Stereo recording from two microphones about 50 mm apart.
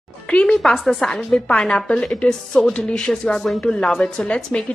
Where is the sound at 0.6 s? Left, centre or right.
Centre.